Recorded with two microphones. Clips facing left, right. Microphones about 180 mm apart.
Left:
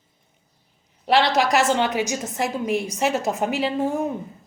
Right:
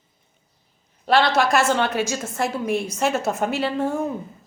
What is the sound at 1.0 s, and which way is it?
A woman's voice, 15° left (ahead or behind).